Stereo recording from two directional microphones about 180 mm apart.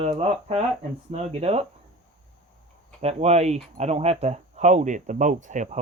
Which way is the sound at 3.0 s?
35° right (ahead or behind).